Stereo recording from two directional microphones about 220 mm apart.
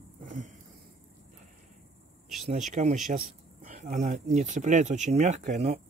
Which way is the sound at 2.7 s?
30° right (ahead or behind).